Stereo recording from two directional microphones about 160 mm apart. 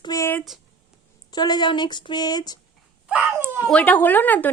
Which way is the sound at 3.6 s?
10° left (ahead or behind).